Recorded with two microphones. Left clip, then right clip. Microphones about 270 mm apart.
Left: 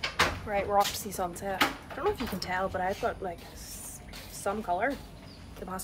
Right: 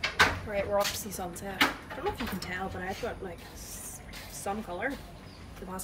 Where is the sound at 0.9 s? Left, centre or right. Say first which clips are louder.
Left 4 dB; centre.